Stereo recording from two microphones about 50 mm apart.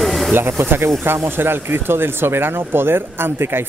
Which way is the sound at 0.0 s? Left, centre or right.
Centre.